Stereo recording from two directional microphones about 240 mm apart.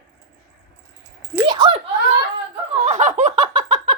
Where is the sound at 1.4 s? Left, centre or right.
Centre.